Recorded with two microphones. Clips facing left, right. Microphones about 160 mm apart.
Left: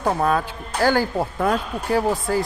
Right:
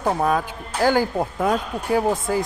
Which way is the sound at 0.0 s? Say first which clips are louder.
Even; 10° right (ahead or behind).